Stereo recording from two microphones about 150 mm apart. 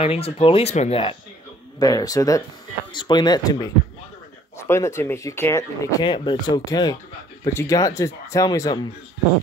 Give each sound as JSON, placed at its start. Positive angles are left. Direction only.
{"t": 0.0, "sound": "speech", "side_deg": 40}
{"t": 1.8, "sound": "speech", "side_deg": 25}
{"t": 6.0, "sound": "speech", "side_deg": 35}